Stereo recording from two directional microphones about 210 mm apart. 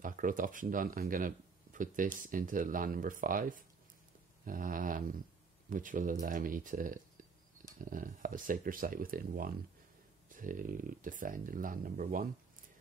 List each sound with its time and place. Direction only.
0.0 s speech: 40° right (ahead or behind)